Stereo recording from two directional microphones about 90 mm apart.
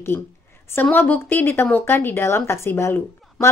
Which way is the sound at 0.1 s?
25° left (ahead or behind).